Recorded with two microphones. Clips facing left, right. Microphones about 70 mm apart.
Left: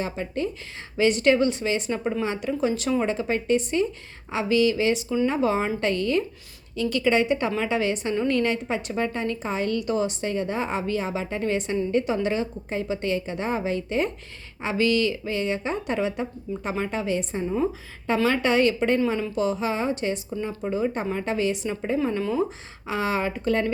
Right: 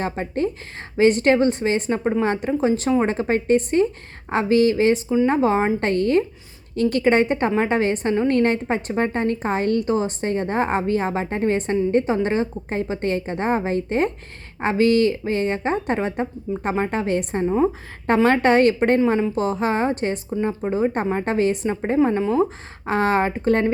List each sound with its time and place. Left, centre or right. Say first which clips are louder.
0.0 s a woman's voice: right 4 dB; right
20.5 s a woman's voice: right 3 dB; right
22.9 s a woman's voice: right 6 dB; right